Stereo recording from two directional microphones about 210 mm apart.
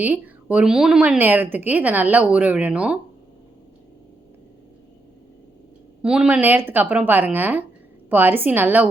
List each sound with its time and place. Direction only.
0.0 s a woman's voice: 5° right (ahead or behind)
6.0 s a woman's voice: 5° right (ahead or behind)